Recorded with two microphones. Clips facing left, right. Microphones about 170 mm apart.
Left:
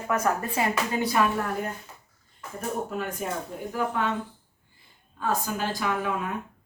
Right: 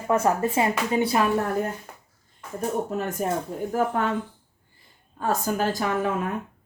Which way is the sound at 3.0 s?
45° right (ahead or behind).